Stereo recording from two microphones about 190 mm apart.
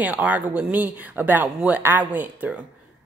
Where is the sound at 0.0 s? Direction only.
10° right (ahead or behind).